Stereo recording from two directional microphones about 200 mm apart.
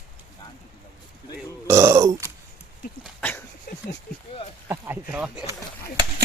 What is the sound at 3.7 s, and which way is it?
Speech, 50° left (ahead or behind).